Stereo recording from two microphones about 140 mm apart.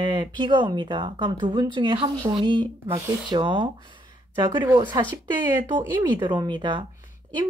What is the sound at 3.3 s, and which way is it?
Speech, 35° right (ahead or behind).